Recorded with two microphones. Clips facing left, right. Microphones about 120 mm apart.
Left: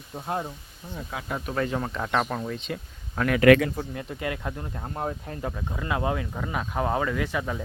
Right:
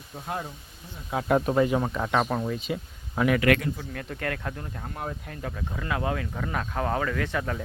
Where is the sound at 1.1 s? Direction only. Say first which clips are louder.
Right 8 dB; 20° right (ahead or behind).